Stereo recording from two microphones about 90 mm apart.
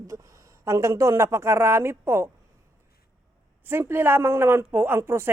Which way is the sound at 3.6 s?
25° right (ahead or behind).